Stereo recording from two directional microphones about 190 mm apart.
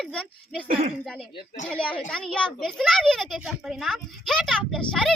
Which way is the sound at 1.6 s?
5° left (ahead or behind).